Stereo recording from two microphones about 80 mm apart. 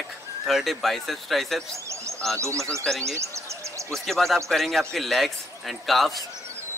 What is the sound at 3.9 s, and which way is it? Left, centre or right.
Speech, centre.